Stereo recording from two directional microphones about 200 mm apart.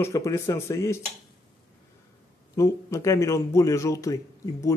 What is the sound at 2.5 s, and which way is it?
Speech, 15° left (ahead or behind).